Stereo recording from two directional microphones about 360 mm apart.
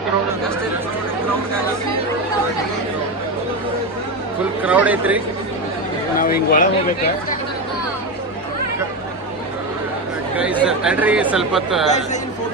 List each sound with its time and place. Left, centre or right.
4.6 s speech: centre
6.1 s speech: left
10.3 s speech: centre